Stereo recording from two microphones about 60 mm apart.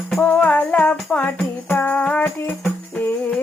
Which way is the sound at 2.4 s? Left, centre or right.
Left.